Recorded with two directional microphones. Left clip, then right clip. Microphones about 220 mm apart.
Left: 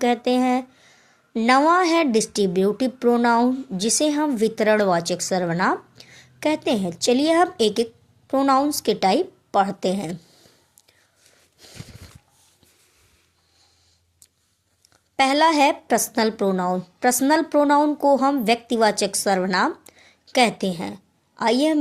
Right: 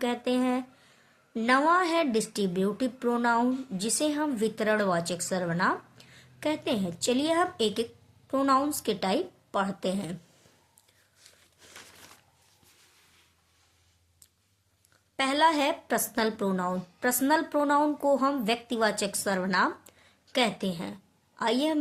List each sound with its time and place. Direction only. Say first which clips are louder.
0.0 s speech: left 8 dB; 30° left (ahead or behind)
15.1 s speech: left 7 dB; 30° left (ahead or behind)